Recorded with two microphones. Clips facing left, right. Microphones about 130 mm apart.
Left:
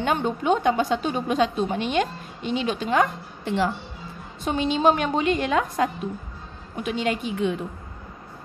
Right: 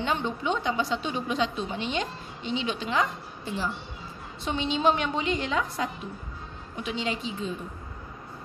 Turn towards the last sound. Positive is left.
turn(degrees=70)  # may be behind; listen again after turning